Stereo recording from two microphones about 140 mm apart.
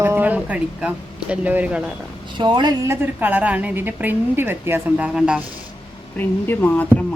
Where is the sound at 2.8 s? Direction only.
15° right (ahead or behind).